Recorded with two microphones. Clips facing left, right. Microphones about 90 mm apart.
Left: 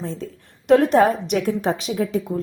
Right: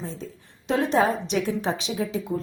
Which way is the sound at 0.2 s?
65° left (ahead or behind).